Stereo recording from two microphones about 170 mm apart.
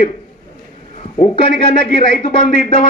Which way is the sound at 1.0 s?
40° left (ahead or behind).